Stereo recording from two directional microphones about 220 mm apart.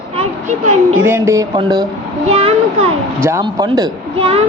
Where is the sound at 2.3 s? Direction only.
25° right (ahead or behind).